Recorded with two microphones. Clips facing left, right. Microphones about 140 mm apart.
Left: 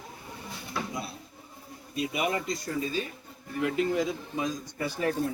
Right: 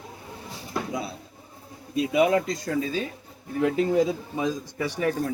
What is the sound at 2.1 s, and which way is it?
Speech, 90° right.